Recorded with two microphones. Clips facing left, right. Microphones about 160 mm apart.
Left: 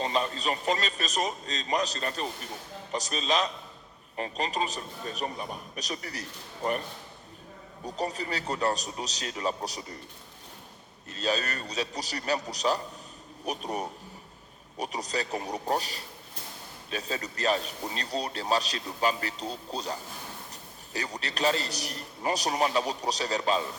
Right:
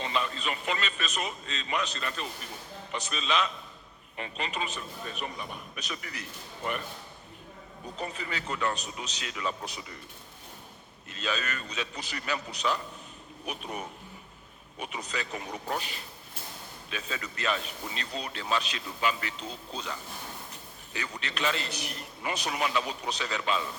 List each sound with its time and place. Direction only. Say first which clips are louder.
0.0 s a man's voice: left 3 dB; 35° left (ahead or behind)
7.9 s a man's voice: left 5 dB; 40° left (ahead or behind)
11.1 s a man's voice: left 4 dB; 40° left (ahead or behind)